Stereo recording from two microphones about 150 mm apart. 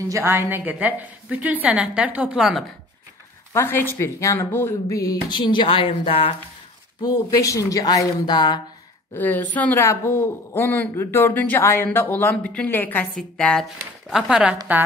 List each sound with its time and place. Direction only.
0.1 s a woman's voice: 15° right (ahead or behind)
3.5 s speech: 15° left (ahead or behind); by 6.3 s 40° left (ahead or behind)
7.0 s speech: 25° left (ahead or behind)
9.1 s a woman's voice: 10° left (ahead or behind); by 14.6 s 5° right (ahead or behind)